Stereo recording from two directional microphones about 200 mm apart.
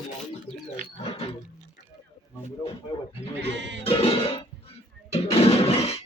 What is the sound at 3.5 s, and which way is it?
Music, 60° right (ahead or behind).